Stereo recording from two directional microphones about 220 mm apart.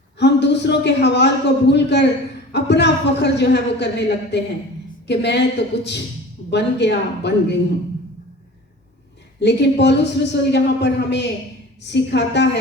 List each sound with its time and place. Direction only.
0.2 s a man's voice: 50° left (ahead or behind)
9.4 s a man's voice: 50° left (ahead or behind)